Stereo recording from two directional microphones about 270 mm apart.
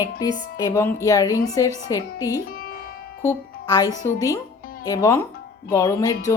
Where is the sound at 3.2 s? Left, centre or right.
Centre.